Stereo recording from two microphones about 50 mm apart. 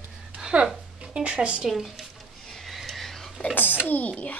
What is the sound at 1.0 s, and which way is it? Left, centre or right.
Speech, centre.